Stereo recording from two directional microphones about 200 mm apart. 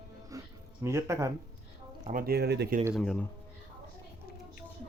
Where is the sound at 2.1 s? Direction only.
50° right (ahead or behind).